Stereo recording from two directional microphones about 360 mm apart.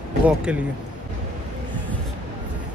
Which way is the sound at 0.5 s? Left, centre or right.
Centre.